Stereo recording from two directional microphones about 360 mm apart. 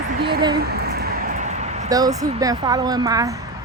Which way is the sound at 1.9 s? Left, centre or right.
Centre.